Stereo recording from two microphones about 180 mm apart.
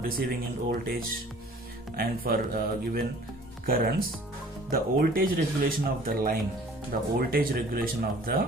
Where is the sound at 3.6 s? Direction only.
50° right (ahead or behind).